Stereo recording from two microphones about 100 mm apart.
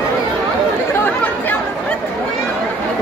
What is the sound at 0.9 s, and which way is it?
Chatter, 20° left (ahead or behind).